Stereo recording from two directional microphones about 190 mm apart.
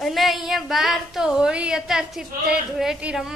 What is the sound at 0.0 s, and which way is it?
Speech, centre (ahead or behind).